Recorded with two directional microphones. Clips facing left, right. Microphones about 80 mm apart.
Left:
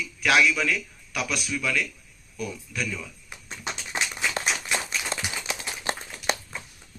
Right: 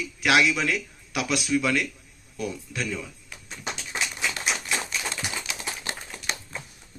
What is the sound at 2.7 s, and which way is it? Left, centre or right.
Speech, right.